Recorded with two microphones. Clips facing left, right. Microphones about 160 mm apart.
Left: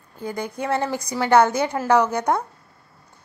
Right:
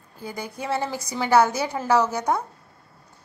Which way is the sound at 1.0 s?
20° right (ahead or behind).